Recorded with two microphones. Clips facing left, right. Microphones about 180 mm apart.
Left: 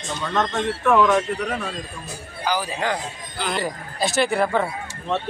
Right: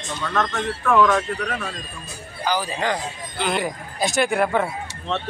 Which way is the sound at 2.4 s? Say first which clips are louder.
Right 1 dB; 10° left (ahead or behind).